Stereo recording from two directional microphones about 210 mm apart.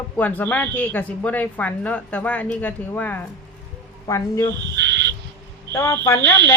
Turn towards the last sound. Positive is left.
turn(degrees=10)  # may be behind; listen again after turning